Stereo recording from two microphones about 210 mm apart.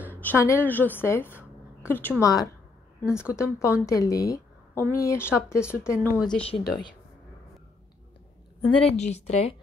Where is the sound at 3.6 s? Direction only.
15° left (ahead or behind).